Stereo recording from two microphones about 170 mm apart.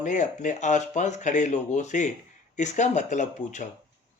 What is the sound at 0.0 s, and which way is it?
Speech, 45° left (ahead or behind).